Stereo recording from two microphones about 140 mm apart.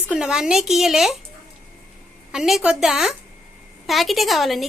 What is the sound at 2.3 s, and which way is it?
A woman's voice, centre (ahead or behind).